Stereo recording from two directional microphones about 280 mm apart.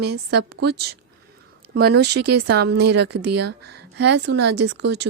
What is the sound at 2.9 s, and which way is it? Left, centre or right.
Speech, right.